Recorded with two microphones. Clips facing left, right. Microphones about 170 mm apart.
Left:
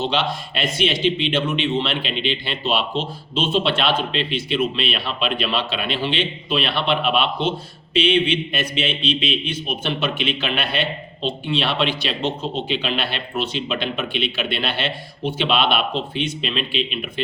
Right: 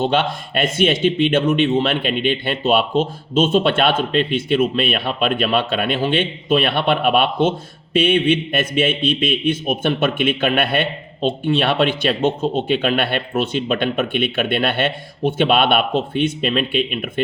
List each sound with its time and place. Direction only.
0.0 s a man's voice: 50° right (ahead or behind)